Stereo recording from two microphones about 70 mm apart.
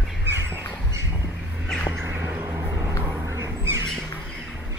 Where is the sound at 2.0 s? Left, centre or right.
Right.